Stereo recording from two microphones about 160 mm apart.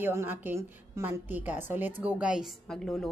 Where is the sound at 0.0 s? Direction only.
15° right (ahead or behind).